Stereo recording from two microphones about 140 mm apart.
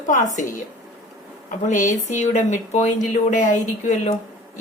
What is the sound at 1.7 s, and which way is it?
A woman's voice, 65° left (ahead or behind).